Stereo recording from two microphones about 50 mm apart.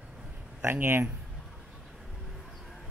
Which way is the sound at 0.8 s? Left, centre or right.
Right.